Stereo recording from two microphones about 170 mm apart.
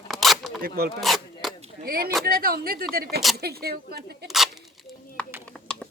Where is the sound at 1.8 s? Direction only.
60° right (ahead or behind).